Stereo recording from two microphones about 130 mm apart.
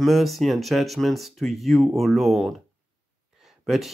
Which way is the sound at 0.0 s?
Centre (ahead or behind).